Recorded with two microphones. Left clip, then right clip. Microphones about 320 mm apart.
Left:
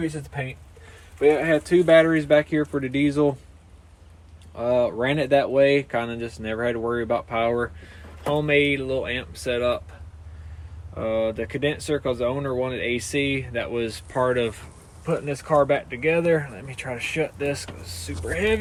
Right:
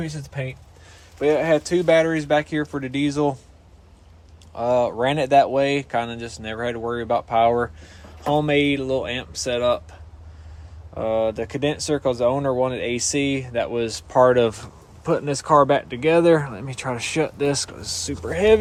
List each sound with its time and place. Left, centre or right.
0.0 s speech: centre
4.5 s speech: centre
10.9 s speech: centre